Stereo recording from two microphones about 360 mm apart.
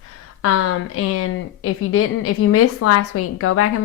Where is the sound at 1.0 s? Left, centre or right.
Left.